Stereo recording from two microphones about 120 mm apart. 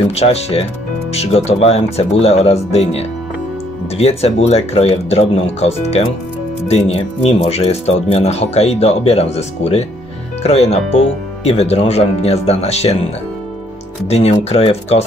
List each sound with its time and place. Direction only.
0.1 s speech: 60° left (ahead or behind)